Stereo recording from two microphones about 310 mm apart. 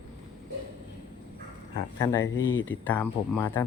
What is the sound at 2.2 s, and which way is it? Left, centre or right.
Speech, left.